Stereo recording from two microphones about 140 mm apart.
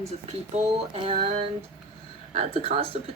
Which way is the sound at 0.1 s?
50° right (ahead or behind).